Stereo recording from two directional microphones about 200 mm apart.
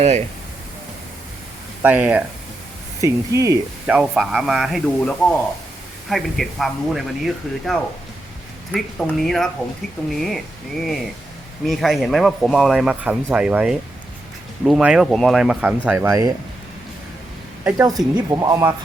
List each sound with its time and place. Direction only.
1.8 s speech: 10° right (ahead or behind)
17.6 s speech: 15° right (ahead or behind)